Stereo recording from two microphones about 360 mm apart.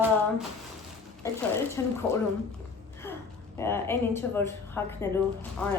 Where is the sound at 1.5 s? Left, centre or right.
Centre.